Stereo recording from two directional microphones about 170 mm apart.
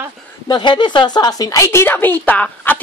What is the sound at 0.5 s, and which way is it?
A woman's voice, 25° left (ahead or behind).